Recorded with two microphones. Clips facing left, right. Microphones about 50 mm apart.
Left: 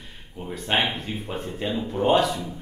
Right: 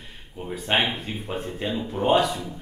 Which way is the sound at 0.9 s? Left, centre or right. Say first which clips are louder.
Even; centre.